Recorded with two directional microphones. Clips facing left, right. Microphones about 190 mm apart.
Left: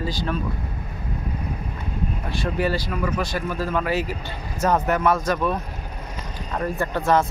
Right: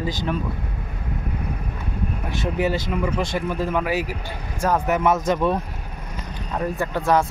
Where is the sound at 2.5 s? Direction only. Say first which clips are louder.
Right 2 dB; 15° right (ahead or behind).